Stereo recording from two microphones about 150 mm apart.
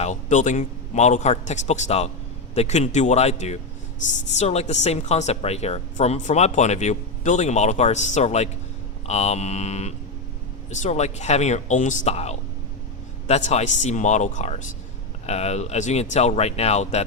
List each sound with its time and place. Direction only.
0.0 s speech: 55° left (ahead or behind)